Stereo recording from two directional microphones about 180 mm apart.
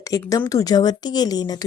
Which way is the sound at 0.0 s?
20° left (ahead or behind).